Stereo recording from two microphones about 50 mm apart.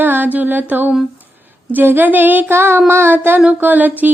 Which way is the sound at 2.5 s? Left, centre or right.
Right.